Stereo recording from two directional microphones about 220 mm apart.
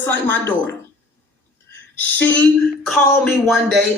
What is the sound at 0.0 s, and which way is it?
Speech, 10° left (ahead or behind).